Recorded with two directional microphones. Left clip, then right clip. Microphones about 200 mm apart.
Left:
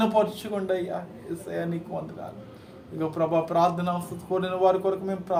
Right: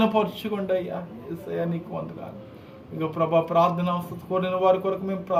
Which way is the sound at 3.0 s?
Centre (ahead or behind).